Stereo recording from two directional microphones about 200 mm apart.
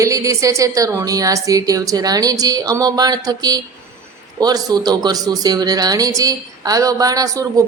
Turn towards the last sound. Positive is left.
turn(degrees=-15)  # may be behind; listen again after turning